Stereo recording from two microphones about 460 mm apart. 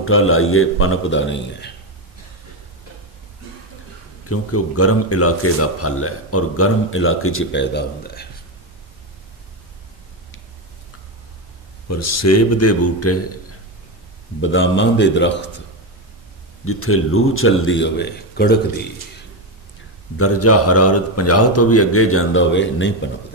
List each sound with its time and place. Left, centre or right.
0.0 s speech: left
4.3 s speech: left
11.9 s speech: left
14.4 s speech: left
16.6 s speech: left
20.2 s speech: left